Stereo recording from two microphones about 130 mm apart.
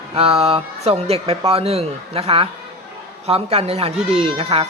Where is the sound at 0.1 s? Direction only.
50° right (ahead or behind).